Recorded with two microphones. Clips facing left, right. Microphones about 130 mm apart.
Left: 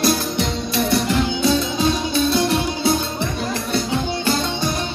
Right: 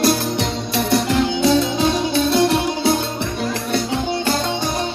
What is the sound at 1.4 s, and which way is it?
Music, 75° right (ahead or behind).